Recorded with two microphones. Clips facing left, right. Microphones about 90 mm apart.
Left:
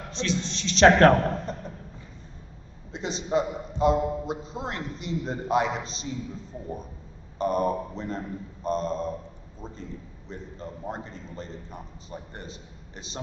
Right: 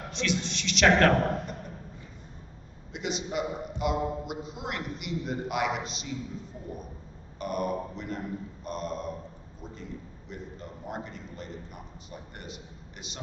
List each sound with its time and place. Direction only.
0.1 s a man's voice: 35° left (ahead or behind)
2.9 s a man's voice: 30° left (ahead or behind)
7.3 s a man's voice: 35° left (ahead or behind)